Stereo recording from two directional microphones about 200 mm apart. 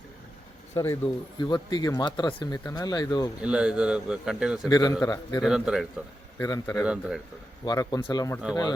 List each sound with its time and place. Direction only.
0.8 s speech: 20° left (ahead or behind)
3.4 s speech: 5° right (ahead or behind)
4.7 s speech: 20° left (ahead or behind)
5.4 s speech: 5° right (ahead or behind)
6.4 s a man's voice: 10° left (ahead or behind)
6.8 s speech: 5° right (ahead or behind)
7.6 s speech: 20° left (ahead or behind)